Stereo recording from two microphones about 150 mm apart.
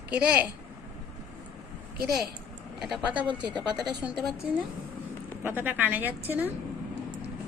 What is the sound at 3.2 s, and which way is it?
Speech, 30° right (ahead or behind).